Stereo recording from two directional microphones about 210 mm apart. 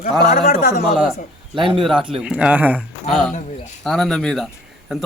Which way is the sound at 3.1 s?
5° left (ahead or behind).